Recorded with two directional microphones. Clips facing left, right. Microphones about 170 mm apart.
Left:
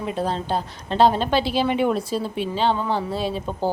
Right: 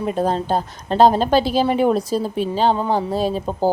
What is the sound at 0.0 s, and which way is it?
A woman's voice, 45° right (ahead or behind).